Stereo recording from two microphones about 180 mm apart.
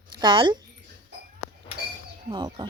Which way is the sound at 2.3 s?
25° right (ahead or behind).